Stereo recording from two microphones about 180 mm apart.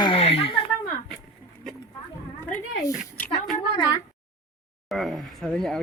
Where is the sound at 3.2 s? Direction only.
10° left (ahead or behind).